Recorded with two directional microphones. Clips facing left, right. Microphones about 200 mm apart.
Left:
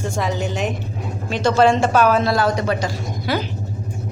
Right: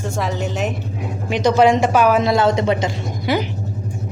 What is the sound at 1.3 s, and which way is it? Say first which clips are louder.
Speech: right 2 dB; 15° right (ahead or behind).